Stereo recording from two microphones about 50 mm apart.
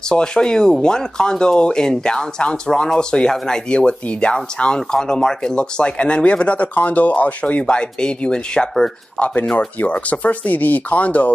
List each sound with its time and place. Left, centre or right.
0.1 s speech: centre
9.2 s speech: left